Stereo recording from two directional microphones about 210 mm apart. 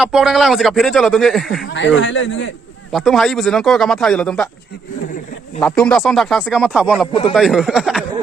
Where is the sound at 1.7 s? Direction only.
60° left (ahead or behind).